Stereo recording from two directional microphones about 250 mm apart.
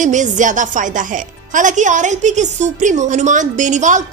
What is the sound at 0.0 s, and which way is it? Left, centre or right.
Speech, right.